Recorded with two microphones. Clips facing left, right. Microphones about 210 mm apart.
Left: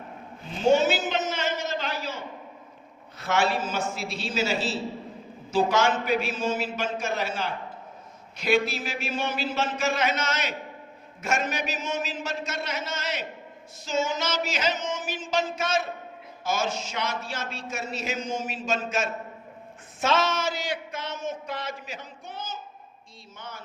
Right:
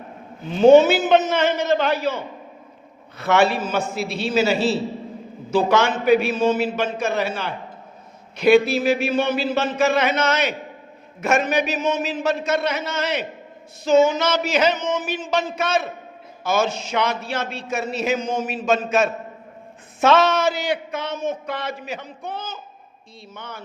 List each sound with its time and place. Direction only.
0.6 s a man's voice: 60° right (ahead or behind)